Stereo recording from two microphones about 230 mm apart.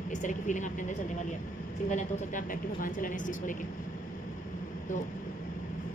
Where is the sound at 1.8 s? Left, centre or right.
Left.